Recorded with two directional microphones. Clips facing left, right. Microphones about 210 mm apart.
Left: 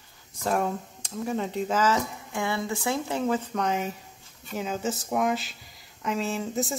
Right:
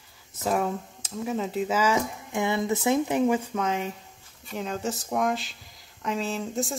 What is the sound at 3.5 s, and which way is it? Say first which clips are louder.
Speech: even; centre (ahead or behind).